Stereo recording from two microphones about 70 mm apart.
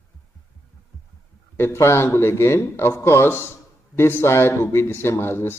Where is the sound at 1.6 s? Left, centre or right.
Left.